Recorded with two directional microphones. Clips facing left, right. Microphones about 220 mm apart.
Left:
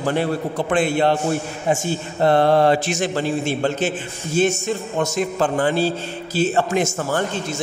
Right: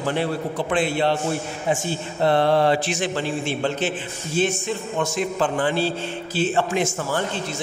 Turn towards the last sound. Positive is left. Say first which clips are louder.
# left 3 dB
turn(degrees=45)  # may be behind; listen again after turning